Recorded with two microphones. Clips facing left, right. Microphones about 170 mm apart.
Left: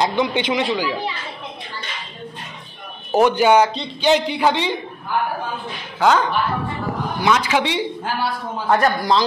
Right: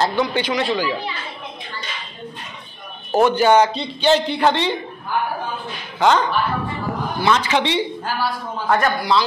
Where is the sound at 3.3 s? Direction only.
10° left (ahead or behind).